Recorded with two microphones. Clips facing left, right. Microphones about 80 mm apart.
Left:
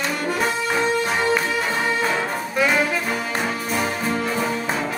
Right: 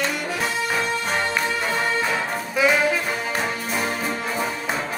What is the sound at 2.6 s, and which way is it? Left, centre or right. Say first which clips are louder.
Brass instrument: right 1 dB; centre.